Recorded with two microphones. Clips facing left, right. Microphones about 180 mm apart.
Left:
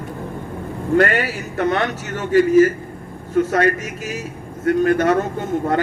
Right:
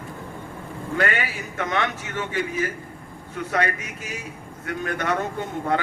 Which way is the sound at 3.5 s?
40° left (ahead or behind).